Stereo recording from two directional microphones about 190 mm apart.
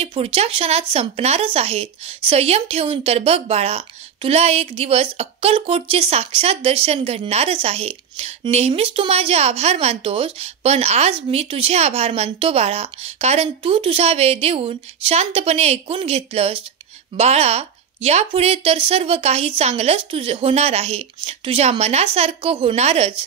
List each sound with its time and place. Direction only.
0.0 s speech: 30° right (ahead or behind)